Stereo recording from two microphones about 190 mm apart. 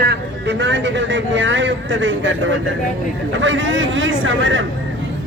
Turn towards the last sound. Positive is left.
turn(degrees=-80)